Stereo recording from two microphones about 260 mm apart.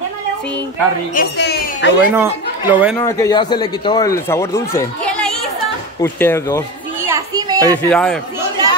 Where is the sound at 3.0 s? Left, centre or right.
Centre.